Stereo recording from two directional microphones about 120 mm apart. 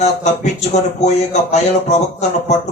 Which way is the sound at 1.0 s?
70° left (ahead or behind).